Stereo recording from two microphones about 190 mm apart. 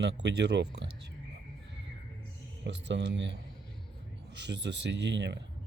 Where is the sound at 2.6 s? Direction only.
65° right (ahead or behind).